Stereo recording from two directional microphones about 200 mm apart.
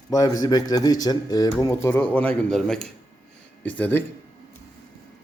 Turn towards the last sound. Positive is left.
turn(degrees=10)  # may be behind; listen again after turning